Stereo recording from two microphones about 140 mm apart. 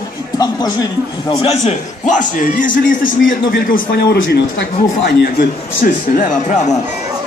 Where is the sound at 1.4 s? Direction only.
50° left (ahead or behind); by 3.8 s 85° left.